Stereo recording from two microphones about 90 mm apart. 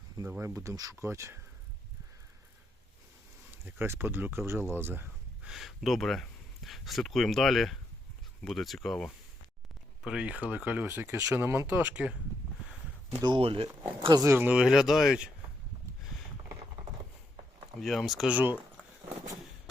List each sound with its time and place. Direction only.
0.3 s speech: 30° right (ahead or behind)
3.7 s speech: 25° right (ahead or behind)
5.4 s speech: 5° right (ahead or behind)
13.2 s speech: 80° right
14.3 s speech: 25° right (ahead or behind)
14.5 s speech: 5° right (ahead or behind)
17.7 s speech: centre (ahead or behind)
18.3 s speech: 15° right (ahead or behind)